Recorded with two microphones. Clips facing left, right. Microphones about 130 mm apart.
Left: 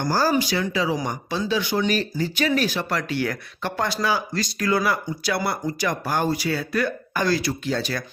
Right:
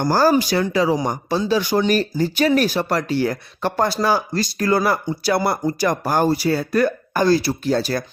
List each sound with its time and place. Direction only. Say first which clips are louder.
0.1 s speech: right 5 dB; 50° right (ahead or behind)